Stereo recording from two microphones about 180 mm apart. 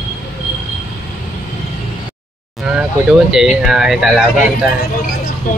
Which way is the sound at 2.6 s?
5° right (ahead or behind).